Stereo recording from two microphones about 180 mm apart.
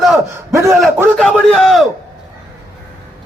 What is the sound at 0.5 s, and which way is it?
Speech, 15° right (ahead or behind).